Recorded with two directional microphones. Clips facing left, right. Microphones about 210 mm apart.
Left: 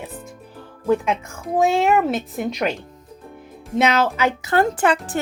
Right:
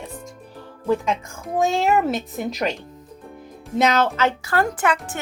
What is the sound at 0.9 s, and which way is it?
Speech, centre (ahead or behind).